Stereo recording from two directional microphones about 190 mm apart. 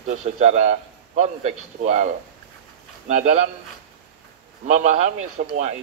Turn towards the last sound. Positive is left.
turn(degrees=-35)  # may be behind; listen again after turning